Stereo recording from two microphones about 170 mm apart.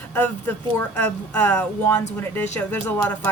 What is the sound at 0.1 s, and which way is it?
Speech, 10° left (ahead or behind).